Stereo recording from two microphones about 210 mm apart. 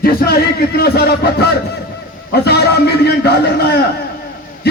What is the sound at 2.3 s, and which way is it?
A man's voice, 50° left (ahead or behind).